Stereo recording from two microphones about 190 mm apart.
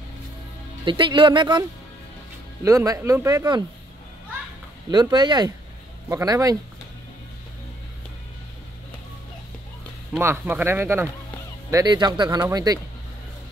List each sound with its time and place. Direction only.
0.8 s speech: 25° right (ahead or behind)
4.9 s speech: 20° right (ahead or behind)
10.1 s speech: 10° right (ahead or behind)